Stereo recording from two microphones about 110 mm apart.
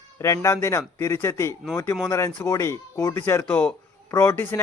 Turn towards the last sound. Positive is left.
turn(degrees=25)  # may be behind; listen again after turning